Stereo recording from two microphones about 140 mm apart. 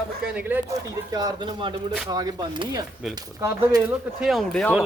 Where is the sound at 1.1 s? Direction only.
30° right (ahead or behind).